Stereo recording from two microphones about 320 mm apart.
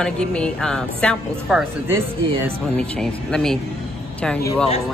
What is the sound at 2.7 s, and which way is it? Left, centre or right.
Speech, centre.